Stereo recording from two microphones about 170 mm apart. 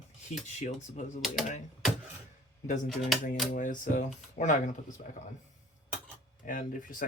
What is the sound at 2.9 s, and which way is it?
Speech, centre (ahead or behind).